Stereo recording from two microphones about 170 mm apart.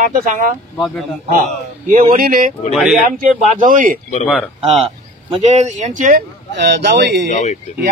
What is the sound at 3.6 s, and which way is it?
Speech, 50° right (ahead or behind).